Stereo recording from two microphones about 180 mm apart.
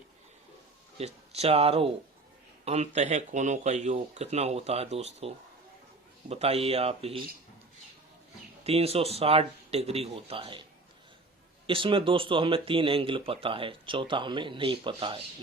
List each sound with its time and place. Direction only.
0.9 s speech: 35° right (ahead or behind)
8.6 s speech: 35° right (ahead or behind)
11.6 s speech: 30° right (ahead or behind)